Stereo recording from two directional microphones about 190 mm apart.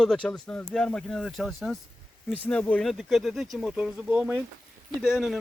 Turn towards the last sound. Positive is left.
turn(degrees=-5)  # may be behind; listen again after turning